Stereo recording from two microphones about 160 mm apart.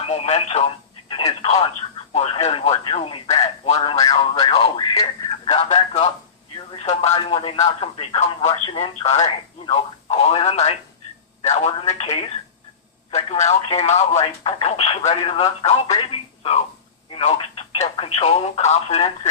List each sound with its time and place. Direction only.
0.0 s speech: 40° left (ahead or behind)
13.1 s a man's voice: 45° left (ahead or behind)